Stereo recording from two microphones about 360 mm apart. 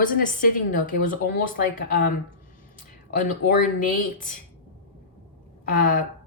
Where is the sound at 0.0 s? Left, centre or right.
Left.